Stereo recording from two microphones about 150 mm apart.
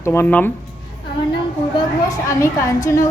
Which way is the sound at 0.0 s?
15° left (ahead or behind).